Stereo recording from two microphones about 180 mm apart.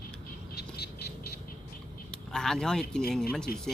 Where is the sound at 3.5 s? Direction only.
55° left (ahead or behind).